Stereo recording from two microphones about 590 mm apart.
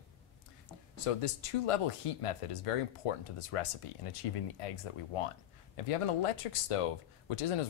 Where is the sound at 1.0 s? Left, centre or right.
Left.